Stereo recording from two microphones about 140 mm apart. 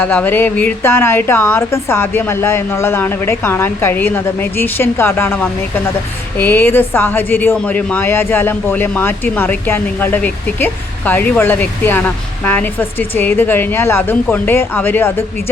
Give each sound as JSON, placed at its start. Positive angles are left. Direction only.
{"t": 0.0, "sound": "a woman's voice", "side_deg": 10}